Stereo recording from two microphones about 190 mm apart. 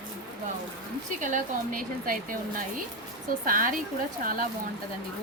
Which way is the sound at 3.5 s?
45° right (ahead or behind).